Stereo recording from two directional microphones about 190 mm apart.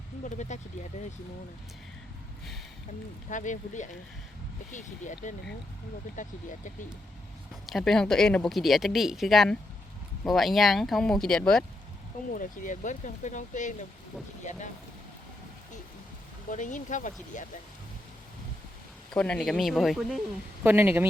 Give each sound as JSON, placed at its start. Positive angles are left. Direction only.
{"t": 0.3, "sound": "speech", "side_deg": 40}
{"t": 3.2, "sound": "speech", "side_deg": 40}
{"t": 7.7, "sound": "speech", "side_deg": 0}
{"t": 12.3, "sound": "speech", "side_deg": 45}
{"t": 16.5, "sound": "speech", "side_deg": 40}
{"t": 19.1, "sound": "speech", "side_deg": 5}